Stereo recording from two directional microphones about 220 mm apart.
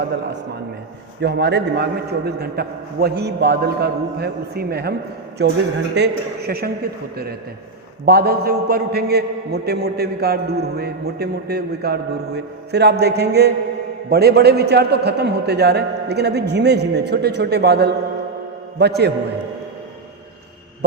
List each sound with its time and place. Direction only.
1.2 s a man's voice: 50° right (ahead or behind)
8.0 s a man's voice: 45° right (ahead or behind)